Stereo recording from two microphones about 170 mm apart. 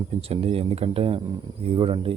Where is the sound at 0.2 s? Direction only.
35° right (ahead or behind).